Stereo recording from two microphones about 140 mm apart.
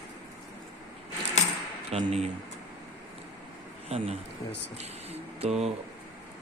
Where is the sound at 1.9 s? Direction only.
45° right (ahead or behind).